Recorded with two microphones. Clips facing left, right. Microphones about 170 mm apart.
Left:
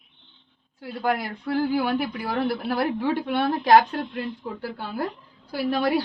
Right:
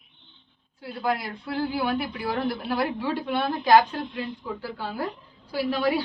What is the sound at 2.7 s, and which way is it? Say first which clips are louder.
A woman's voice: left 2 dB; 55° left (ahead or behind).